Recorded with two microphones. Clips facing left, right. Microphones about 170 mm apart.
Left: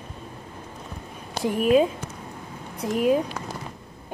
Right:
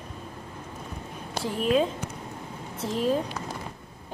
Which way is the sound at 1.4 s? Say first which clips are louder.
Left 5 dB; 10° left (ahead or behind).